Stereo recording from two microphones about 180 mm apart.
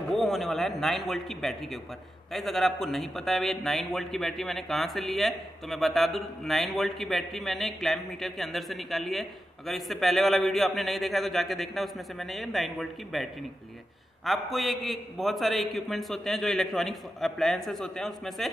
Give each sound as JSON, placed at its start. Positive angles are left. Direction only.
{"t": 0.1, "sound": "a man's voice", "side_deg": 0}